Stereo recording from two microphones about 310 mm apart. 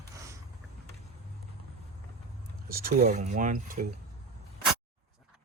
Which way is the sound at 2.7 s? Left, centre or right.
Right.